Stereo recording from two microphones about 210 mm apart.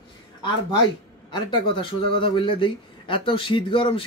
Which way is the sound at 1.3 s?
25° left (ahead or behind).